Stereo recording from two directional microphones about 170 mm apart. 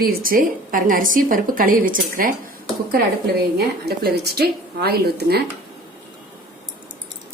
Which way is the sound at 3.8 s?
70° right (ahead or behind).